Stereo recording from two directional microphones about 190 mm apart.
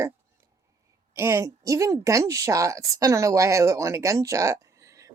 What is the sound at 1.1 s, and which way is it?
A woman's voice, 15° right (ahead or behind).